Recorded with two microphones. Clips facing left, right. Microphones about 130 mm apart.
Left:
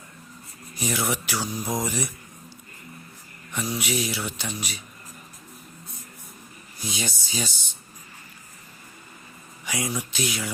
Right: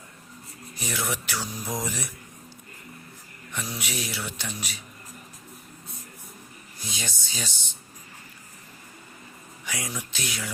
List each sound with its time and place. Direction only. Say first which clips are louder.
0.8 s speech: left 4 dB; 10° left (ahead or behind)
1.4 s mantra: left 4 dB; 25° left (ahead or behind)
1.8 s speech: left 4 dB; centre (ahead or behind)
3.5 s speech: left 6 dB; 5° left (ahead or behind)
6.8 s speech: left 5 dB; 10° left (ahead or behind)
9.6 s speech: left 5 dB; 5° left (ahead or behind)